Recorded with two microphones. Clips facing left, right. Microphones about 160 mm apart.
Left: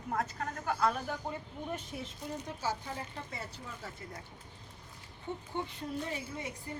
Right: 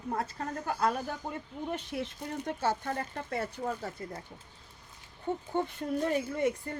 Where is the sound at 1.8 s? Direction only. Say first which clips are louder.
Right 6 dB; 70° right (ahead or behind); by 3.7 s 55° right (ahead or behind).